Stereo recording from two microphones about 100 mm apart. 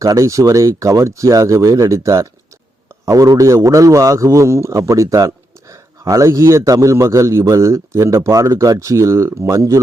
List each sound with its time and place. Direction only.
0.0 s a man's voice: 30° right (ahead or behind)